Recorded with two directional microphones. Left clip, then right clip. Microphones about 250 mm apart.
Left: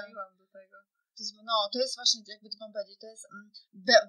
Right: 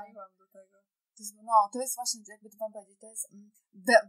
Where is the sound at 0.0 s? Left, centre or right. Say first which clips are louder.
Left 4 dB; right.